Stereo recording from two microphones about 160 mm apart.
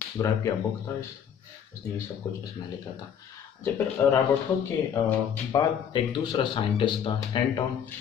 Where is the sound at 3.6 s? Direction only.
15° left (ahead or behind).